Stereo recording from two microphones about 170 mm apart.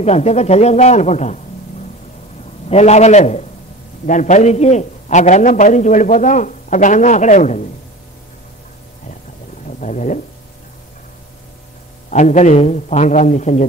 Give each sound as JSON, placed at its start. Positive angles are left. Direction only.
{"t": 0.0, "sound": "speech", "side_deg": 40}
{"t": 2.7, "sound": "a man's voice", "side_deg": 40}
{"t": 9.7, "sound": "speech", "side_deg": 45}
{"t": 12.1, "sound": "a man's voice", "side_deg": 45}